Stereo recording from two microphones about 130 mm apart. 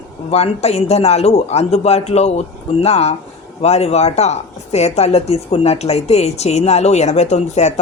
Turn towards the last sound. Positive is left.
turn(degrees=60)  # may be behind; listen again after turning